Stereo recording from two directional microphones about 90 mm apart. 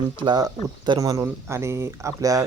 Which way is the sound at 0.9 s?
35° right (ahead or behind).